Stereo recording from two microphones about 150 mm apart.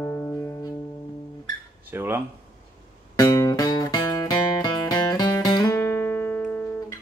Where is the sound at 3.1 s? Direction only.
25° left (ahead or behind).